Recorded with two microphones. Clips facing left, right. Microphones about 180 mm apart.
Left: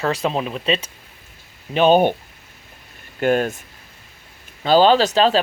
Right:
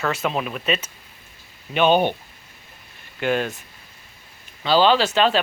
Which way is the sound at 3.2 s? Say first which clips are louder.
Left 4 dB; 45° left (ahead or behind).